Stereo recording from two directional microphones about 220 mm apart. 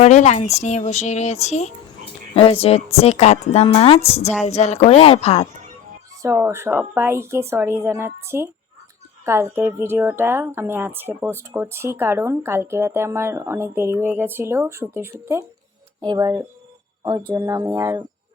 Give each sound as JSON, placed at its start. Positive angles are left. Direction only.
{"t": 0.0, "sound": "a woman's voice", "side_deg": 30}
{"t": 6.2, "sound": "a woman's voice", "side_deg": -10}